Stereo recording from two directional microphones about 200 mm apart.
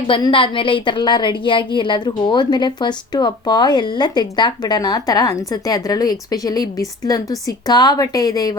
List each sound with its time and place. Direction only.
0.1 s a woman's voice: 25° left (ahead or behind)